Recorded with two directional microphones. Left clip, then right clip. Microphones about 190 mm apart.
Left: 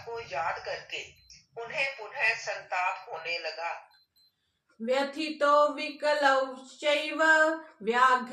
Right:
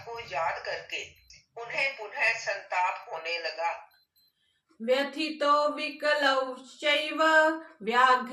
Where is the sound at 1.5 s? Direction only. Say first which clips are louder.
Right 1 dB; 20° right (ahead or behind).